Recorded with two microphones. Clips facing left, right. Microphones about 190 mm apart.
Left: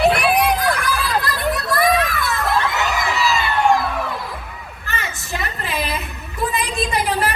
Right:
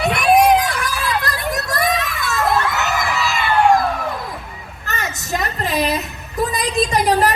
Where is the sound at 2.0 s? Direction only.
50° left (ahead or behind).